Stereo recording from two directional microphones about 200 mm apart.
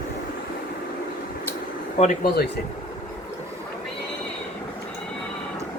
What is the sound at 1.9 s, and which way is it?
Speech, 35° left (ahead or behind).